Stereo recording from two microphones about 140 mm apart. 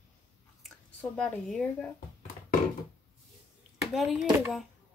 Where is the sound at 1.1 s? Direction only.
5° left (ahead or behind).